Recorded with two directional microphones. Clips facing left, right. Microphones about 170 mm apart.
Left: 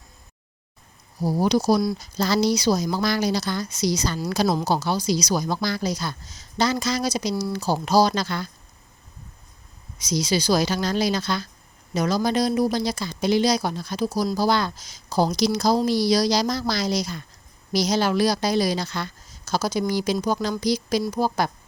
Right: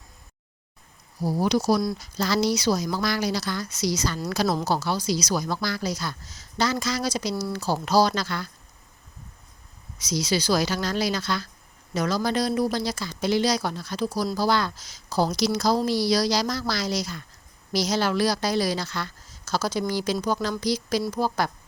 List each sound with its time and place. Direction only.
1.4 s speech: 35° left (ahead or behind)
2.0 s a woman's voice: 25° left (ahead or behind)
10.1 s a woman's voice: 15° left (ahead or behind)